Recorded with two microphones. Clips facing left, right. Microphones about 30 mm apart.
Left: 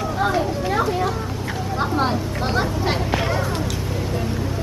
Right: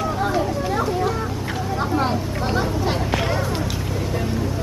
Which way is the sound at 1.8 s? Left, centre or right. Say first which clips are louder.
Left 1 dB; centre.